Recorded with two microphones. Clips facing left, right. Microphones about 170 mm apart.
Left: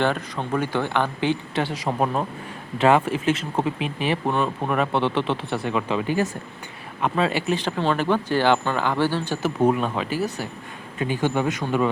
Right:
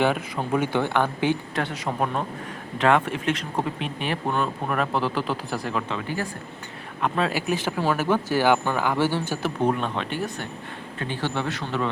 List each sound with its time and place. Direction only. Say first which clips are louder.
0.0 s speech: even; 10° right (ahead or behind)
1.5 s speech: left 3 dB; 30° left (ahead or behind)
2.8 s speech: left 3 dB; 5° left (ahead or behind)
5.9 s speech: left 6 dB; 15° left (ahead or behind)
7.0 s speech: left 2 dB; centre (ahead or behind)
9.4 s speech: left 5 dB; 5° left (ahead or behind)